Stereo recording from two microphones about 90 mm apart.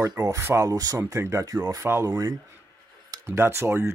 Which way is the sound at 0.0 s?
40° right (ahead or behind).